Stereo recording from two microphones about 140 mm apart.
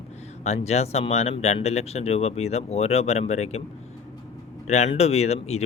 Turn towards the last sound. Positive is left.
turn(degrees=50)  # may be behind; listen again after turning